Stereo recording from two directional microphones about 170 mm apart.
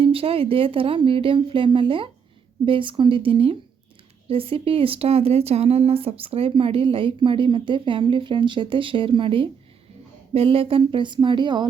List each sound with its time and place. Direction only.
0.0 s speech: 35° right (ahead or behind)